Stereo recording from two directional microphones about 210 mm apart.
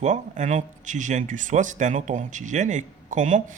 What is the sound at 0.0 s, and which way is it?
Speech, 35° right (ahead or behind).